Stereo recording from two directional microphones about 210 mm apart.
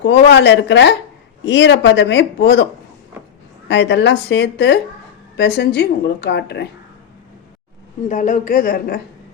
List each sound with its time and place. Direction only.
0.0 s speech: 55° left (ahead or behind)
3.7 s a woman's voice: 55° left (ahead or behind)
8.0 s a woman's voice: 40° left (ahead or behind)